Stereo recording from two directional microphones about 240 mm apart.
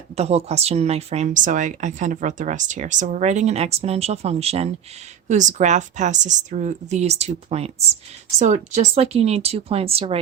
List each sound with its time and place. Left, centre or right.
0.2 s a woman's voice: right